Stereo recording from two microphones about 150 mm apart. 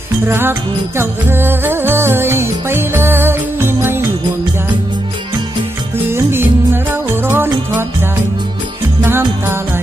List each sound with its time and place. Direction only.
0.3 s music: 15° right (ahead or behind)
6.1 s music: 15° right (ahead or behind)
9.0 s music: 15° right (ahead or behind)